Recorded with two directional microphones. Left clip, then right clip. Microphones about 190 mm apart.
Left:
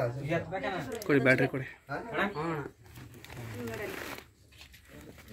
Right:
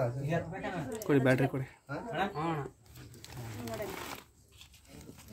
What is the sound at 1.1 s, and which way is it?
Speech, 20° right (ahead or behind).